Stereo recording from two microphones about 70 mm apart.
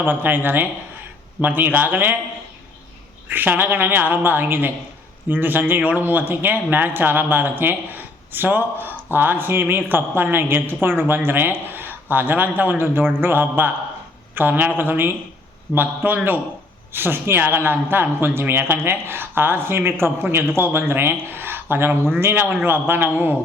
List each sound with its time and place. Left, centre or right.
0.0 s speech: right
3.2 s speech: right